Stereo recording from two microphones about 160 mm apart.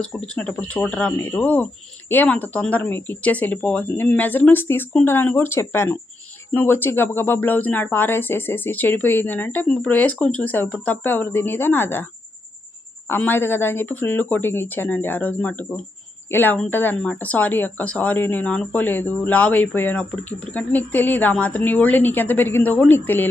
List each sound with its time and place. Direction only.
0.3 s speech: 5° left (ahead or behind)
13.1 s speech: 10° left (ahead or behind)